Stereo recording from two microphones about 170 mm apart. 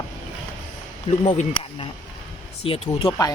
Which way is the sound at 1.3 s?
45° left (ahead or behind).